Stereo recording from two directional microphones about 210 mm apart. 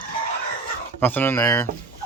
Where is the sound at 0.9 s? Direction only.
10° left (ahead or behind).